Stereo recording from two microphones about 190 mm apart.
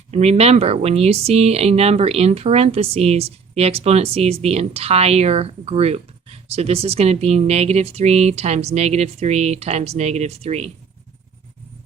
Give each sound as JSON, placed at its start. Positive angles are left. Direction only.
{"t": 0.1, "sound": "speech", "side_deg": -35}